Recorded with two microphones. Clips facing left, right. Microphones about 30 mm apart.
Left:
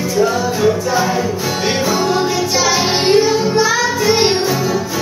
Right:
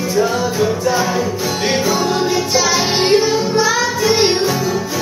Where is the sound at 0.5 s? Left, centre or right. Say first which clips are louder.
Left 2 dB; centre.